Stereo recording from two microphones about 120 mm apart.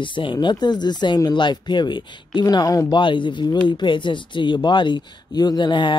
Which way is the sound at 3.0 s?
45° left (ahead or behind).